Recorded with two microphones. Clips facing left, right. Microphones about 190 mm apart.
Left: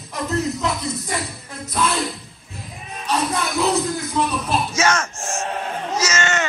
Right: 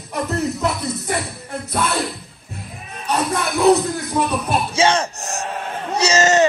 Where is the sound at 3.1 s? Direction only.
60° right (ahead or behind).